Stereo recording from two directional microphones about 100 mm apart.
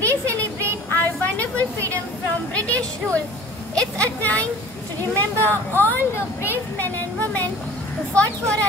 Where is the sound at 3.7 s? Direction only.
10° left (ahead or behind).